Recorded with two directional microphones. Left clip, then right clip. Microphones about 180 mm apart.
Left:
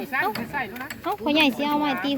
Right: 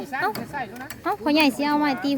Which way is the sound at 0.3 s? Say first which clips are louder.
Left 2 dB; 55° right (ahead or behind).